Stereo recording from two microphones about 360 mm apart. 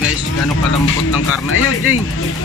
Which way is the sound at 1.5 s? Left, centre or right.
Left.